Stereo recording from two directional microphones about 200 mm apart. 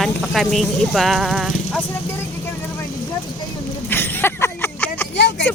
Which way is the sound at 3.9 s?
10° left (ahead or behind).